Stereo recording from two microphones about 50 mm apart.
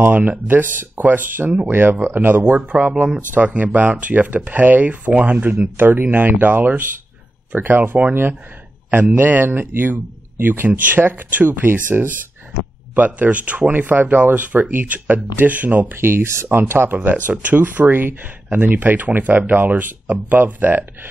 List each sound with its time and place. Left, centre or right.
0.1 s speech: right
2.7 s speech: right
15.9 s speech: right